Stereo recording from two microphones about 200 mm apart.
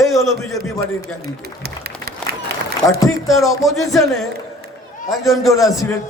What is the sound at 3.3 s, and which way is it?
A man's voice, centre (ahead or behind).